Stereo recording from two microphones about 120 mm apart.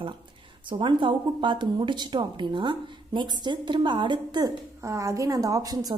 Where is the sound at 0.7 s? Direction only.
45° right (ahead or behind).